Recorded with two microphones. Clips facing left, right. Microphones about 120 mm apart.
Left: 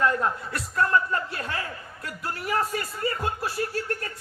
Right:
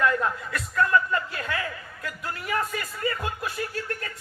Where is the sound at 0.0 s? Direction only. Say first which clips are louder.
Even; 35° left (ahead or behind).